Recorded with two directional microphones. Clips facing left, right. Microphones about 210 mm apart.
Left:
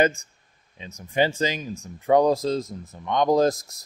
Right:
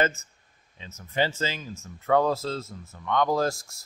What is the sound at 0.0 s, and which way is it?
Speech, 15° left (ahead or behind).